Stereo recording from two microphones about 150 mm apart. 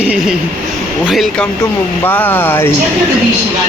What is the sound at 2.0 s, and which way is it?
Speech, 15° left (ahead or behind).